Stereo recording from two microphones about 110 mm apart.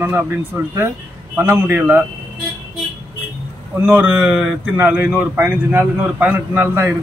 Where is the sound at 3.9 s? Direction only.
15° right (ahead or behind).